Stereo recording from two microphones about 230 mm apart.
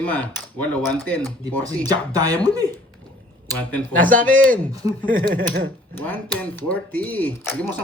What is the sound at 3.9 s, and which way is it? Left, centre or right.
Speech, right.